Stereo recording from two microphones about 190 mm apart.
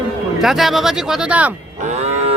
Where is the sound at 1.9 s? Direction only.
35° right (ahead or behind).